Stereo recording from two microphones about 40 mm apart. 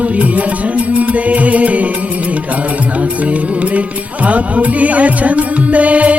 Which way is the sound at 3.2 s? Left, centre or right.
Right.